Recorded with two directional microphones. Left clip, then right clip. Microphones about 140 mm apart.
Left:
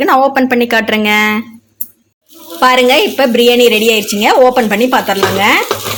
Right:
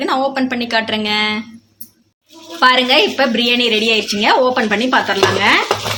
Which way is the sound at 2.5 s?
40° left (ahead or behind).